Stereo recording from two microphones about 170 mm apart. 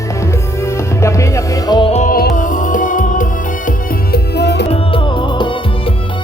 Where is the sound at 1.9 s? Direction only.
55° left (ahead or behind).